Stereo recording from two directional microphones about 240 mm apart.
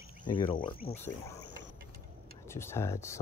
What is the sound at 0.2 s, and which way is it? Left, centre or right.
Cricket, left.